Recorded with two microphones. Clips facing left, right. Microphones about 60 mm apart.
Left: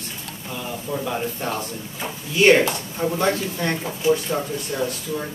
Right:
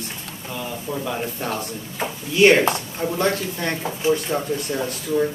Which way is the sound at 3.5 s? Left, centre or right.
Centre.